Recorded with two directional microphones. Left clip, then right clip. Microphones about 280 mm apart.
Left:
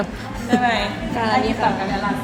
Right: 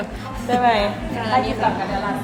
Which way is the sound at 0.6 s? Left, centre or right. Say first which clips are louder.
Right 3 dB; right.